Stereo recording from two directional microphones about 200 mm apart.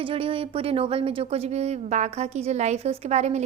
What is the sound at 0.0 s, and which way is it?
Speech, 30° right (ahead or behind).